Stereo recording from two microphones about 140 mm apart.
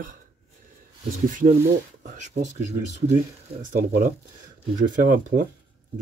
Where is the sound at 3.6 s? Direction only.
70° right (ahead or behind).